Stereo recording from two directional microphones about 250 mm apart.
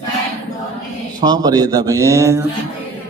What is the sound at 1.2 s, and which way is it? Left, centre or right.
A man's voice, centre.